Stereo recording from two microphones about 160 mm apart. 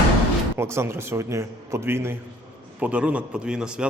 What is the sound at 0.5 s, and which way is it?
A man's voice, 15° right (ahead or behind).